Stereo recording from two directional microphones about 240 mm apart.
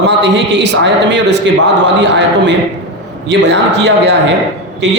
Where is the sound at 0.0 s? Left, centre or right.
Right.